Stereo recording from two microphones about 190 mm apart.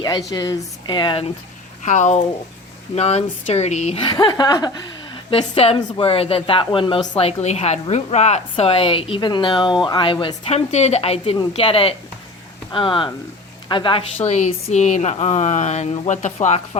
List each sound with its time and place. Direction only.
0.0 s a woman's voice: 20° left (ahead or behind)
1.8 s a woman's voice: 40° left (ahead or behind)
14.3 s speech: 35° left (ahead or behind)